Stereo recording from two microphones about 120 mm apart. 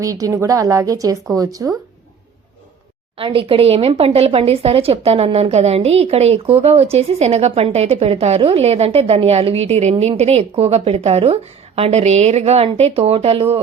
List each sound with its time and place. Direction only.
0.0 s a woman's voice: 30° right (ahead or behind)
3.2 s speech: 45° right (ahead or behind)